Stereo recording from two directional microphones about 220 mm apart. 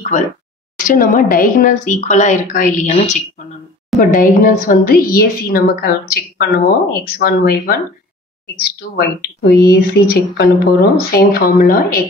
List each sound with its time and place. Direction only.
0.8 s a woman's voice: 40° left (ahead or behind)